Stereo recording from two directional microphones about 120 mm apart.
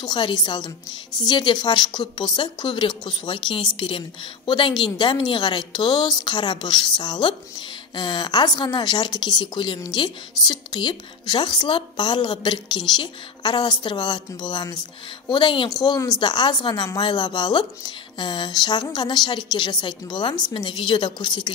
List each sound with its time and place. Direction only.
0.0 s speech: 40° left (ahead or behind)
15.7 s speech: 30° left (ahead or behind)